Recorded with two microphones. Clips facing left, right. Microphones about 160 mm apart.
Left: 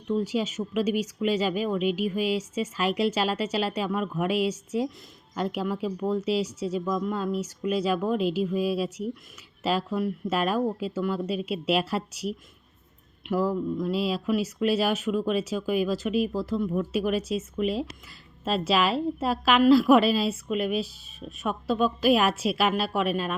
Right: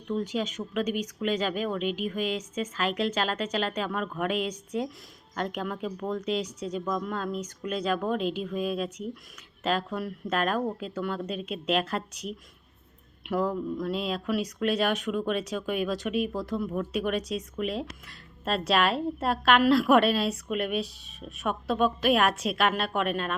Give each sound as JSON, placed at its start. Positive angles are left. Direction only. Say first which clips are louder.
{"t": 0.1, "sound": "a woman's voice", "louder": "left 3 dB", "side_deg": 10}